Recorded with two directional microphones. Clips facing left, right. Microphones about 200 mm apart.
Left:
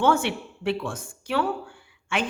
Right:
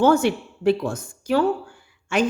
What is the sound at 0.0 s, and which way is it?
A man's voice, 40° right (ahead or behind).